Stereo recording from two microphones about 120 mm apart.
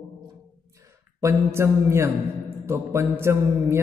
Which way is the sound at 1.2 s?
20° right (ahead or behind).